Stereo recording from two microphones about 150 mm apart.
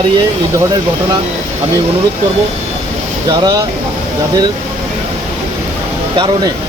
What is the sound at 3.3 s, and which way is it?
Speech, 30° right (ahead or behind).